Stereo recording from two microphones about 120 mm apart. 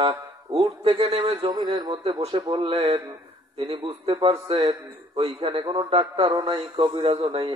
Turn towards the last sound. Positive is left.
turn(degrees=-55)  # may be behind; listen again after turning